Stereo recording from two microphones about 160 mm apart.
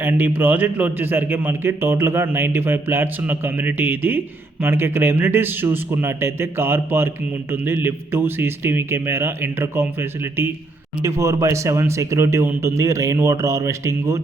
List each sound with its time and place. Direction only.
0.0 s a man's voice: 15° right (ahead or behind)